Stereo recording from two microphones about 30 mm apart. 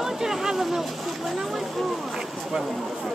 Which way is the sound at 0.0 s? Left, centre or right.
Centre.